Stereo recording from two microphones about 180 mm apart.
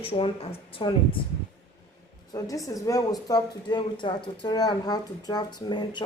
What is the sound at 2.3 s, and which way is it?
A woman's voice, 20° left (ahead or behind).